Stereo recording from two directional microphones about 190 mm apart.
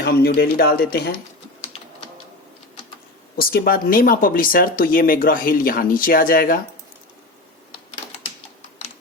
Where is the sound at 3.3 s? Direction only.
50° left (ahead or behind).